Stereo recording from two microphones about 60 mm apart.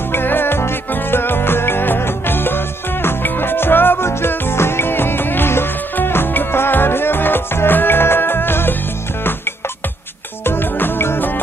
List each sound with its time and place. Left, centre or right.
0.1 s music: left
10.4 s music: left